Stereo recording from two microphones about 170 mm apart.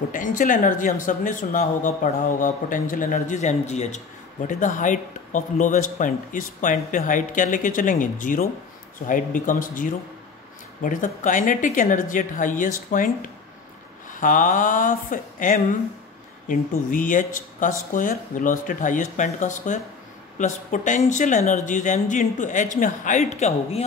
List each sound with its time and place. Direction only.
0.1 s speech: 50° left (ahead or behind)